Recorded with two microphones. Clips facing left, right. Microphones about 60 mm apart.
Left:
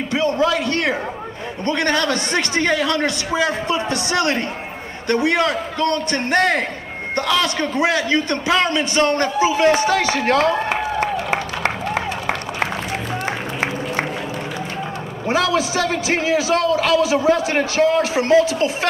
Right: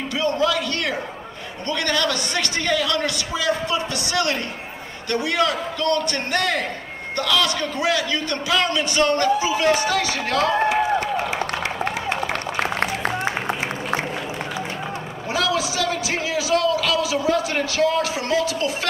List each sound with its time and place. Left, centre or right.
0.1 s a man's voice: left
13.2 s music: left
15.2 s a man's voice: left